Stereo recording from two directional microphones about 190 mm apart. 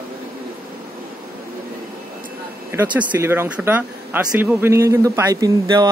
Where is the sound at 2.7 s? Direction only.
10° right (ahead or behind).